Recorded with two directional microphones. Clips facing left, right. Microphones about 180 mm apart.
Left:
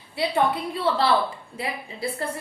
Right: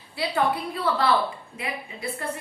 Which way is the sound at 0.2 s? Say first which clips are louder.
Left 2 dB; 25° left (ahead or behind).